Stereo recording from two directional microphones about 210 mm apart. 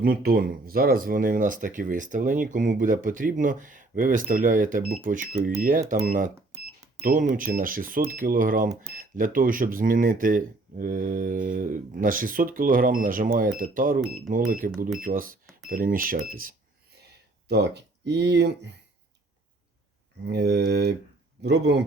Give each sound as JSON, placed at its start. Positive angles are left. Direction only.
{"t": 0.0, "sound": "speech", "side_deg": -45}
{"t": 17.5, "sound": "speech", "side_deg": -55}
{"t": 20.2, "sound": "speech", "side_deg": -50}